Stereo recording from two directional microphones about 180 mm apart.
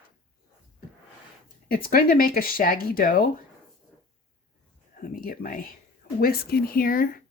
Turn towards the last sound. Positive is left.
turn(degrees=55)  # may be behind; listen again after turning